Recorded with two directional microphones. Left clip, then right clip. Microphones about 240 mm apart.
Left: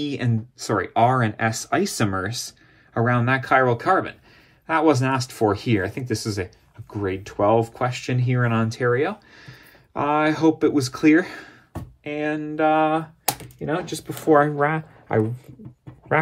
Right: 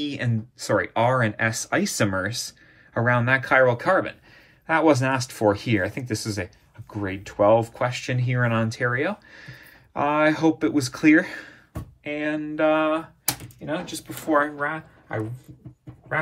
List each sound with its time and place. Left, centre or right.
0.0 s speech: left
13.6 s speech: left